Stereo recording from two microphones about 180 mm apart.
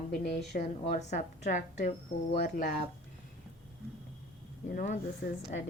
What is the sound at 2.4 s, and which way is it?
Speech, 55° left (ahead or behind).